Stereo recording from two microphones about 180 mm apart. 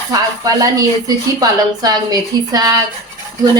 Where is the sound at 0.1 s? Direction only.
20° right (ahead or behind).